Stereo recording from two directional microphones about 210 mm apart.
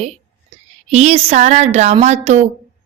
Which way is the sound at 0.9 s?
30° right (ahead or behind).